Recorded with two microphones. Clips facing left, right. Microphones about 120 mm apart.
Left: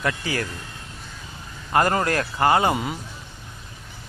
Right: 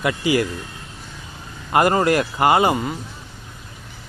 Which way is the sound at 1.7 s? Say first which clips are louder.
Right 4 dB; 10° right (ahead or behind).